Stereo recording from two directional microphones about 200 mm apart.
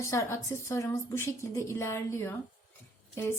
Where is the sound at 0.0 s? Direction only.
15° left (ahead or behind).